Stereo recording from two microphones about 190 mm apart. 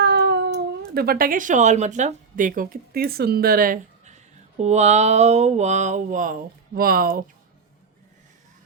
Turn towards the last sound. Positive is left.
turn(degrees=-50)  # may be behind; listen again after turning